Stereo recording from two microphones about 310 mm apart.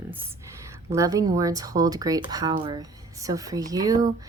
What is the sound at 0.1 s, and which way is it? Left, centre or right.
Speech, centre.